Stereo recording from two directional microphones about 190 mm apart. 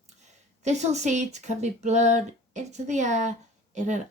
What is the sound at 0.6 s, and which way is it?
Speech, 35° right (ahead or behind).